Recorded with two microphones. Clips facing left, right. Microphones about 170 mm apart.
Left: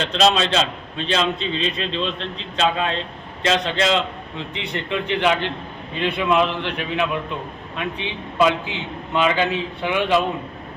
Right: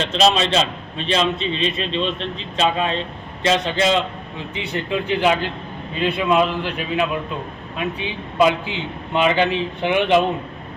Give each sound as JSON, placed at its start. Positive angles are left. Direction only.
{"t": 0.0, "sound": "a man's voice", "side_deg": 0}
{"t": 9.1, "sound": "speech", "side_deg": -15}